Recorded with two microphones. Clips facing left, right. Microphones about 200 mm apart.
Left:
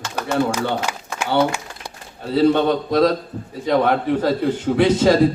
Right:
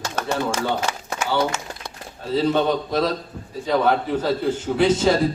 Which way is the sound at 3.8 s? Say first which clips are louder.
Left 2 dB; 60° left (ahead or behind).